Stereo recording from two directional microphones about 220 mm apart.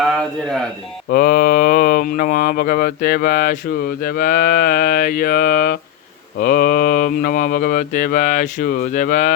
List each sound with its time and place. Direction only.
0.1 s speech: centre (ahead or behind)
1.1 s speech: 40° left (ahead or behind)